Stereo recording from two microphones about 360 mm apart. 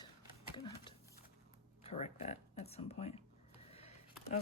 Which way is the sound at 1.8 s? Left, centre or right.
Centre.